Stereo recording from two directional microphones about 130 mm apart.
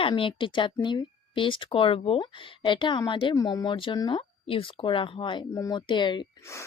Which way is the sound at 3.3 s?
25° left (ahead or behind).